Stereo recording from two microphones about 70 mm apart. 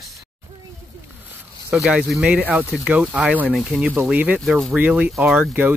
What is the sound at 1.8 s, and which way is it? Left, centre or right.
Speech, centre.